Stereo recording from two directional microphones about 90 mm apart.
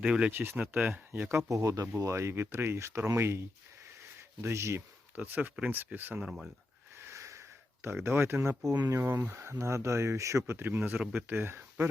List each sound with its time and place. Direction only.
0.0 s speech: 10° right (ahead or behind)
6.1 s speech: 5° right (ahead or behind)
6.9 s a sound: 30° right (ahead or behind)
8.0 s speech: 25° right (ahead or behind)
8.6 s speech: 40° right (ahead or behind)
9.0 s speech: 25° right (ahead or behind)